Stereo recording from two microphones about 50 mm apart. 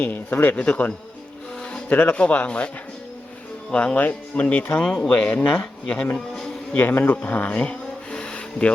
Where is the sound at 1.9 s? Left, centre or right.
Left.